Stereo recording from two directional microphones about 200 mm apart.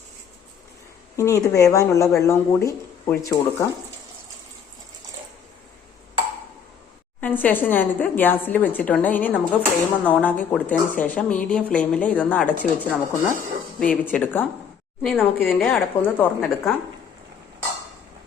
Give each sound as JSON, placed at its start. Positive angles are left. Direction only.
{"t": 1.1, "sound": "a woman's voice", "side_deg": 15}
{"t": 7.2, "sound": "a woman's voice", "side_deg": 10}